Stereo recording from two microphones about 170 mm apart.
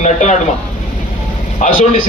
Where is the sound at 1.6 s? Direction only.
50° left (ahead or behind).